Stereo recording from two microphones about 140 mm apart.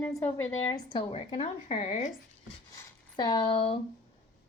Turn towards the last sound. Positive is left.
turn(degrees=35)  # may be behind; listen again after turning